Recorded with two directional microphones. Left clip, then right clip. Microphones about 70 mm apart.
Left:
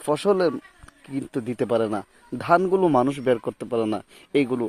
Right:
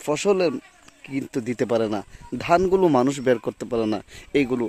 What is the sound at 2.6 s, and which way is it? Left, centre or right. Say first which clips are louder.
Speech: right 1 dB; right.